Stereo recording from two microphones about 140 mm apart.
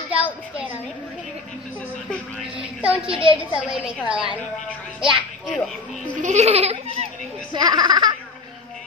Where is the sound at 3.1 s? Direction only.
35° right (ahead or behind).